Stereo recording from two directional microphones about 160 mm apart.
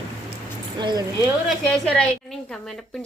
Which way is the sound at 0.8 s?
25° right (ahead or behind).